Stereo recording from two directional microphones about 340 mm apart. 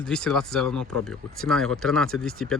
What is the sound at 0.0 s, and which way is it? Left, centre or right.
Speech, centre.